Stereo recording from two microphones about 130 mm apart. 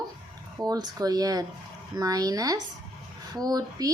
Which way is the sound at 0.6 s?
30° right (ahead or behind).